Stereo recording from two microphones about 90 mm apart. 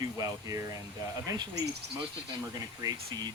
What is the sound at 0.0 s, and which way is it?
Speech, 45° right (ahead or behind).